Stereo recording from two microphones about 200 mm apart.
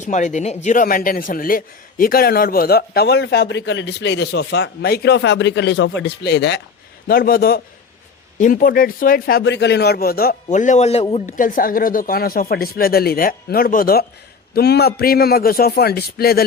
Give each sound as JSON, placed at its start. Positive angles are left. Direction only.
{"t": 0.0, "sound": "a man's voice", "side_deg": 40}
{"t": 7.1, "sound": "speech", "side_deg": 45}
{"t": 9.4, "sound": "speech", "side_deg": 60}
{"t": 11.3, "sound": "speech", "side_deg": 45}